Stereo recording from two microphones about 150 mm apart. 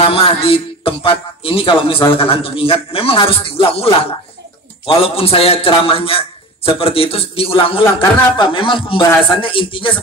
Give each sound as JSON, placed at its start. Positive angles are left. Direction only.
{"t": 0.1, "sound": "a man's voice", "side_deg": 40}